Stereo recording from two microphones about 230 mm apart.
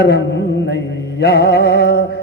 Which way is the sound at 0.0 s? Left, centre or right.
Left.